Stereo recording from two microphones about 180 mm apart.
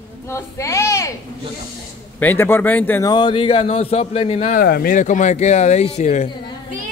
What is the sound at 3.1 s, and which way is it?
Speech, 25° left (ahead or behind).